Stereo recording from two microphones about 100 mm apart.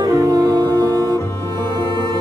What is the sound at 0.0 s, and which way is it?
Music, 35° right (ahead or behind).